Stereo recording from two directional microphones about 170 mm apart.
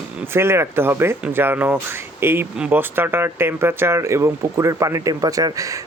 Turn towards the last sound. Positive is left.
turn(degrees=-20)  # may be behind; listen again after turning